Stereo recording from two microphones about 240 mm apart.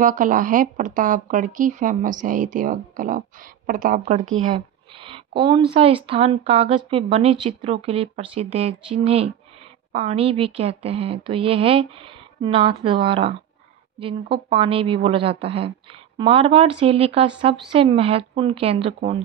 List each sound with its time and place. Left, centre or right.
0.0 s speech: right
4.5 s a sound: right
5.7 s speech: right